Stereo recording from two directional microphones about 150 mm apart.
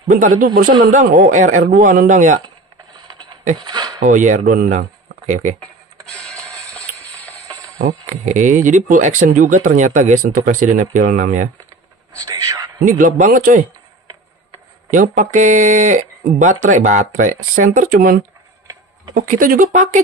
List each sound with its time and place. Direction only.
0.1 s speech: 60° right (ahead or behind)
3.0 s a sound: 25° right (ahead or behind)
4.0 s speech: 55° right (ahead or behind)
6.8 s a sound: 10° left (ahead or behind)
7.8 s speech: 55° right (ahead or behind)
12.2 s whispering: 20° right (ahead or behind)
12.8 s speech: 60° right (ahead or behind)
14.9 s speech: 60° right (ahead or behind)